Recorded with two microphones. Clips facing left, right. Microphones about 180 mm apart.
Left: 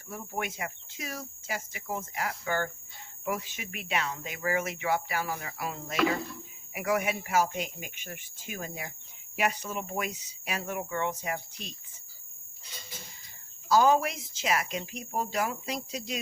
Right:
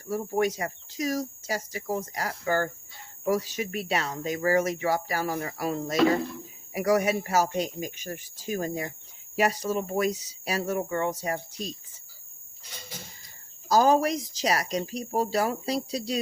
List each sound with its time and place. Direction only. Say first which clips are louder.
0.1 s speech: right 10 dB; 40° right (ahead or behind)
13.7 s speech: right 2 dB; 40° right (ahead or behind)